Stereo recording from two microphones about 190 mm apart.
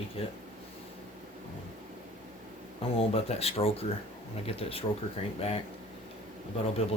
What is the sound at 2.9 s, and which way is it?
Speech, 30° left (ahead or behind).